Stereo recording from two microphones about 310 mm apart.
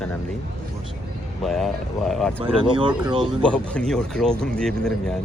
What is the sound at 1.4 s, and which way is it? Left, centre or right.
Speech, centre.